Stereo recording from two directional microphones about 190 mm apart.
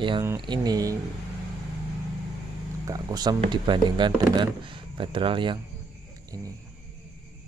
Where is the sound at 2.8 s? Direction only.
20° right (ahead or behind).